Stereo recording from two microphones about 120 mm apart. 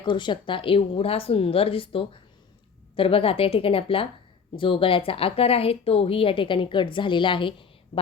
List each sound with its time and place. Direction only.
0.0 s a woman's voice: 40° left (ahead or behind)